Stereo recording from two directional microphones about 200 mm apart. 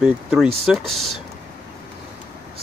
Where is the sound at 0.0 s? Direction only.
5° right (ahead or behind).